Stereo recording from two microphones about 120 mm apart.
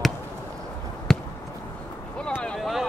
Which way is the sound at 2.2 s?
10° left (ahead or behind).